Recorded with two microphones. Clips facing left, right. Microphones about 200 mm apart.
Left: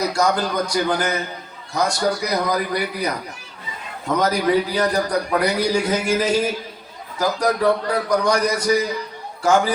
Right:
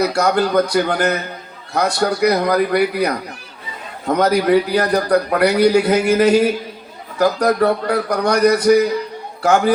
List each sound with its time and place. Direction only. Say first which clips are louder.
0.0 s a man's voice: right 4 dB; 60° right (ahead or behind)